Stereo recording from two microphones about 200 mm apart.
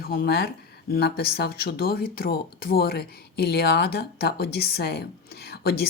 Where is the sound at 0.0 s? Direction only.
50° left (ahead or behind).